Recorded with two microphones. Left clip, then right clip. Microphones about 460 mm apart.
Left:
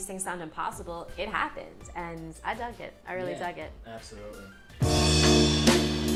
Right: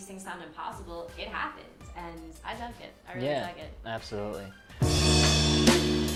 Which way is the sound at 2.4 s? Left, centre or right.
Left.